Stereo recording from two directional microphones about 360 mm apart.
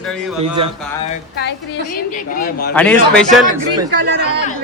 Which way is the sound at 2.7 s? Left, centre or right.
Centre.